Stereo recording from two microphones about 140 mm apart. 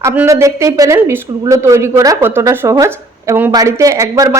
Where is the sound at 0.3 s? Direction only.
20° right (ahead or behind).